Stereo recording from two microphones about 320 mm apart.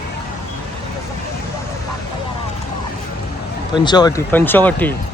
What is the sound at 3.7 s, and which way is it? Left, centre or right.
Speech, centre.